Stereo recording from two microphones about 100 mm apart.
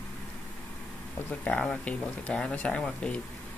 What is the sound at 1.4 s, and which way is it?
Speech, 10° left (ahead or behind).